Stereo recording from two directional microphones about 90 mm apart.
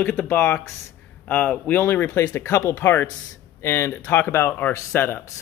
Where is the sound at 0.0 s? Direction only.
15° left (ahead or behind).